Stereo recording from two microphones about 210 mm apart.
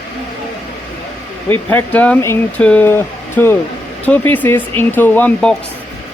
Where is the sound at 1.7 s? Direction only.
10° left (ahead or behind).